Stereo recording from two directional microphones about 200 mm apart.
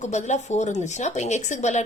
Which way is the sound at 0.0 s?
35° left (ahead or behind).